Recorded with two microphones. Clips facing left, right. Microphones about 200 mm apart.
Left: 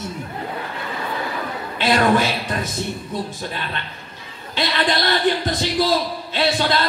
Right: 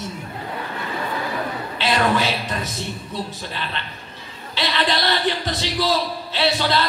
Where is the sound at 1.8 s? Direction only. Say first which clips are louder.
Left 3 dB; 50° left (ahead or behind).